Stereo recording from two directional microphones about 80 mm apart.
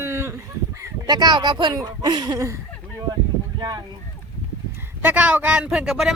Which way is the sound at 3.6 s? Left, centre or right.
Right.